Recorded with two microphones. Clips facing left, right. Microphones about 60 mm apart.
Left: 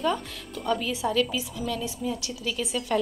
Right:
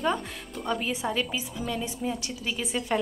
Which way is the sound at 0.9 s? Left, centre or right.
Right.